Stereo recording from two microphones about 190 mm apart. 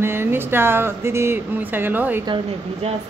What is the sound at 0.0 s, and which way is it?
Speech, 10° right (ahead or behind).